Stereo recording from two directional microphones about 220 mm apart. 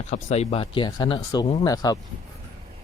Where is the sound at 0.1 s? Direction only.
30° left (ahead or behind).